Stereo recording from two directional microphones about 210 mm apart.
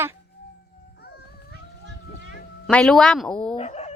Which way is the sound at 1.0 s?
50° left (ahead or behind).